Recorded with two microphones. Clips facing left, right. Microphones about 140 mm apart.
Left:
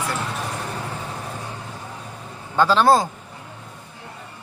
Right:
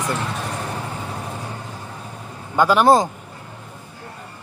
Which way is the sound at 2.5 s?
15° right (ahead or behind).